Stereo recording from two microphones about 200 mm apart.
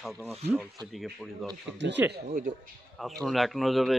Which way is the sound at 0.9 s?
Centre (ahead or behind).